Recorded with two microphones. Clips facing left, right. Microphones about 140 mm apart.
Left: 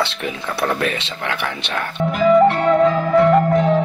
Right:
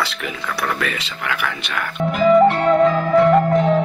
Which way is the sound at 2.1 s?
Centre (ahead or behind).